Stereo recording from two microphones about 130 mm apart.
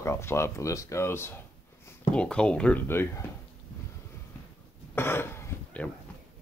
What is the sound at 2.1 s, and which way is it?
Speech, 10° left (ahead or behind).